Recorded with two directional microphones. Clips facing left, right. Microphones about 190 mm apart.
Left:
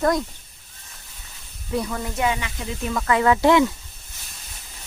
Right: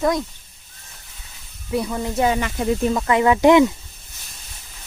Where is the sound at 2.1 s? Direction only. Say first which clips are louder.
Right 5 dB; 40° right (ahead or behind).